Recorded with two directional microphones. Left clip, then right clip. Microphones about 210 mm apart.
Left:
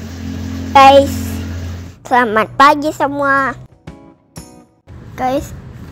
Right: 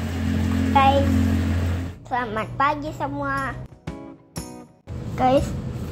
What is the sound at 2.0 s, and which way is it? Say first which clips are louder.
A woman's voice: left 14 dB; 55° left (ahead or behind).